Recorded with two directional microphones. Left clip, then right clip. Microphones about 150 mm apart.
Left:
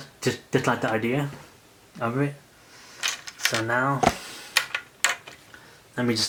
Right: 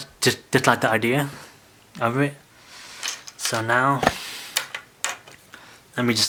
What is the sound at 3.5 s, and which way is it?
Speech, 30° right (ahead or behind).